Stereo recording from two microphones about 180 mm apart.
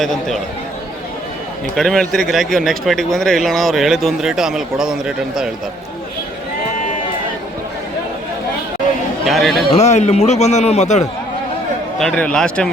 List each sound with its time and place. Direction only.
0.0 s speech: centre (ahead or behind)
1.7 s speech: centre (ahead or behind)
9.2 s speech: centre (ahead or behind)
9.7 s a man's voice: 40° left (ahead or behind)
11.9 s speech: 5° left (ahead or behind)